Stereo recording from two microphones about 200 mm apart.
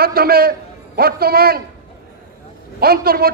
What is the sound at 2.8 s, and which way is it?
Speech, 50° right (ahead or behind).